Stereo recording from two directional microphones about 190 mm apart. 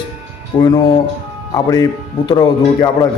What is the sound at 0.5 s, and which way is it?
Speech, 25° left (ahead or behind).